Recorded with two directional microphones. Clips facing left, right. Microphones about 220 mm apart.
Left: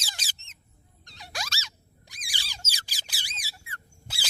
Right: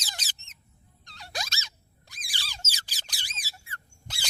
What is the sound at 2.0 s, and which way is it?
Squeak, 15° left (ahead or behind).